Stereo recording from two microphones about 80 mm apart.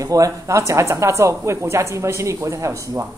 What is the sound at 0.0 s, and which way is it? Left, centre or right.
Speech, right.